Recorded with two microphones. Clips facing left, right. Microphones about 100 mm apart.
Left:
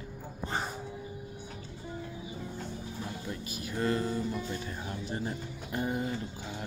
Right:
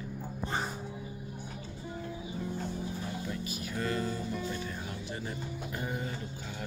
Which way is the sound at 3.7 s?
25° left (ahead or behind).